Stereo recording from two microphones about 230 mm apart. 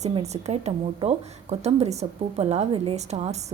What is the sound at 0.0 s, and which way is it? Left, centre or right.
A woman's voice, right.